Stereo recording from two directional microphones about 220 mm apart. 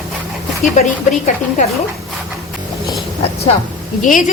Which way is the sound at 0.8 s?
35° left (ahead or behind).